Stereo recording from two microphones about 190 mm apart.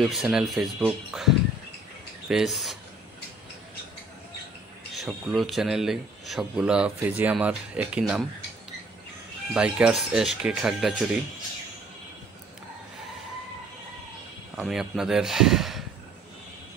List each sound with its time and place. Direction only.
0.0 s a man's voice: centre (ahead or behind)
4.9 s a man's voice: centre (ahead or behind)
9.5 s a man's voice: 5° right (ahead or behind)
14.6 s a man's voice: centre (ahead or behind)